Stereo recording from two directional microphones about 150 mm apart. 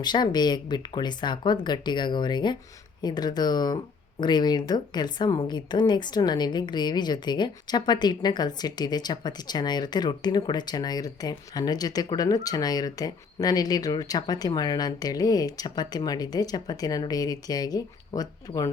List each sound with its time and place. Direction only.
0.0 s a woman's voice: 30° left (ahead or behind)